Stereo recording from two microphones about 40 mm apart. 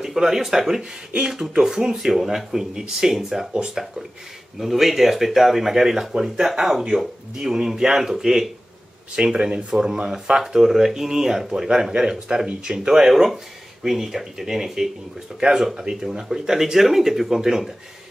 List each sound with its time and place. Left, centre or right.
0.0 s speech: centre